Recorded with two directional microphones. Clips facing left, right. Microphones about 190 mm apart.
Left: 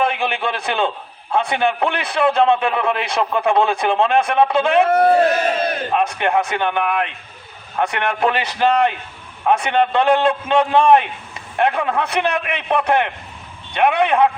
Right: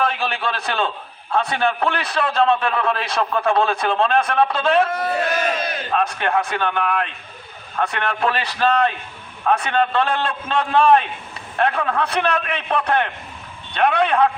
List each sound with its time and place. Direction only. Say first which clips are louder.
0.0 s a man's voice: left 2 dB; 15° left (ahead or behind)
4.9 s a man's voice: left 10 dB; 55° left (ahead or behind)
5.1 s battle cry: left 6 dB; 30° left (ahead or behind)
5.6 s speech: left 5 dB; 50° left (ahead or behind)
5.9 s a man's voice: even; 15° left (ahead or behind)